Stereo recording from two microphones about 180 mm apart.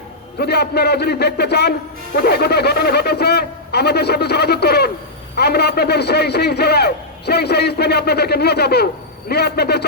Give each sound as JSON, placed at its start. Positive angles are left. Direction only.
{"t": 0.3, "sound": "a man's voice", "side_deg": 65}